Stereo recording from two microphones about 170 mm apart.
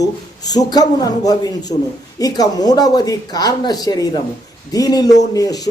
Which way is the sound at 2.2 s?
20° left (ahead or behind).